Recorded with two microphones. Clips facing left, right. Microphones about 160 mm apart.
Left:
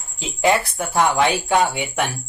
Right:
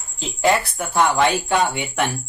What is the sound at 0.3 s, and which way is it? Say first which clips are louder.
Speech: even; 10° left (ahead or behind).